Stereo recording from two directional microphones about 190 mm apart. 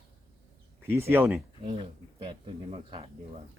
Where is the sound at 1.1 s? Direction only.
10° right (ahead or behind).